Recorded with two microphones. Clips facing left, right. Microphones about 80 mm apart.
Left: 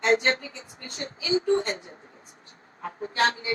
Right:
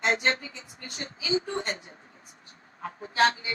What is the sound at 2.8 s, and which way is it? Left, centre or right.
Speech, left.